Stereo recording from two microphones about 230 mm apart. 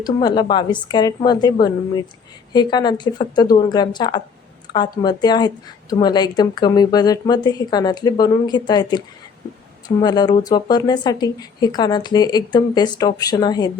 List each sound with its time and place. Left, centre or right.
0.0 s a woman's voice: centre